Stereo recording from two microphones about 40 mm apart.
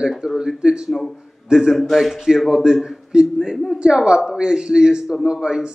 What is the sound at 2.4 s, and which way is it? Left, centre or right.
Speech, centre.